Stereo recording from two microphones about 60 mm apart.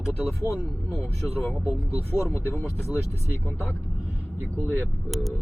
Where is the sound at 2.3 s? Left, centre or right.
Left.